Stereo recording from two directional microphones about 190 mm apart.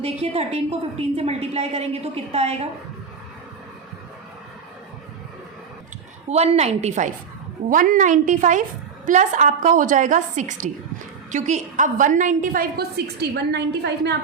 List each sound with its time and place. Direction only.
0.0 s a woman's voice: 35° right (ahead or behind)
6.2 s a woman's voice: 35° right (ahead or behind); by 14.2 s 60° right (ahead or behind)